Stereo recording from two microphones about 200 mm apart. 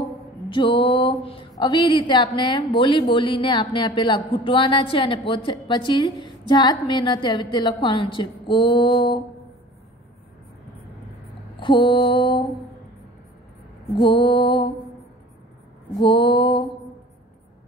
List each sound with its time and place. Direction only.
0.5 s a sound: 25° left (ahead or behind)
1.6 s a woman's voice: 25° left (ahead or behind)
11.6 s a woman's voice: 25° left (ahead or behind)
13.9 s a woman's voice: 20° left (ahead or behind)
16.0 s a woman's voice: 25° left (ahead or behind)